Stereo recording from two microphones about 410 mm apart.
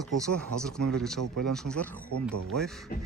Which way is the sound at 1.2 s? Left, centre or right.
Right.